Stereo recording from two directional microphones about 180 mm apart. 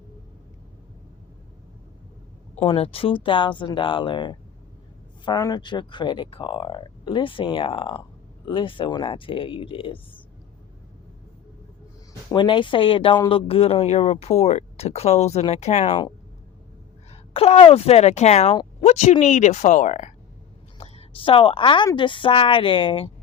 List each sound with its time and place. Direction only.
2.6 s speech: 30° left (ahead or behind)
12.3 s speech: 25° left (ahead or behind)